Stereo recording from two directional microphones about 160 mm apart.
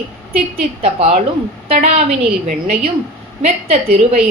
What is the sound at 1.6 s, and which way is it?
Speech, 45° right (ahead or behind).